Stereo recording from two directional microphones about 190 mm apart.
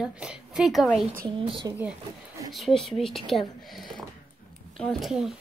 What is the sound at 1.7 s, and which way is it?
Speech, 15° right (ahead or behind).